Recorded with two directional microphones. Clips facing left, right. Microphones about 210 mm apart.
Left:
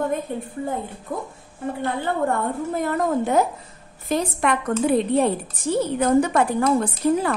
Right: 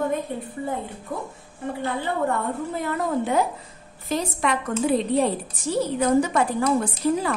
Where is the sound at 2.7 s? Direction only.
45° left (ahead or behind).